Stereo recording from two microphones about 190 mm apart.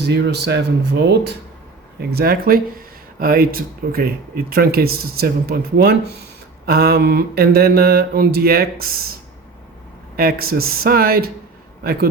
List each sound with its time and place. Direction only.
0.0 s speech: 60° right (ahead or behind)
10.2 s a man's voice: 50° right (ahead or behind)